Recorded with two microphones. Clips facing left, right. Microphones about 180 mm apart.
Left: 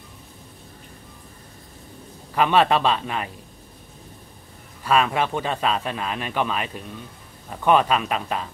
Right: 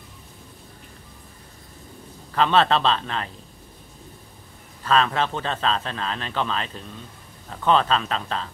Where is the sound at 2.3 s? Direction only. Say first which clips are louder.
Left 1 dB; 10° left (ahead or behind).